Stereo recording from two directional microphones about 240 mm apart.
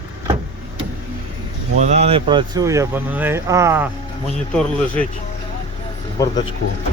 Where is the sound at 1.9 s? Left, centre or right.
Right.